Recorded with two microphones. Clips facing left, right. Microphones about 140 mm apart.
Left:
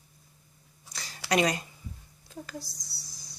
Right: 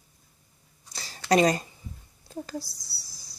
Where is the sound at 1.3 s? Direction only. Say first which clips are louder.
Right 5 dB; 35° right (ahead or behind).